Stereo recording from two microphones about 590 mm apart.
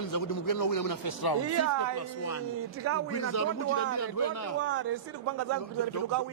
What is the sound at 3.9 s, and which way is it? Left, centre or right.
Speech, left.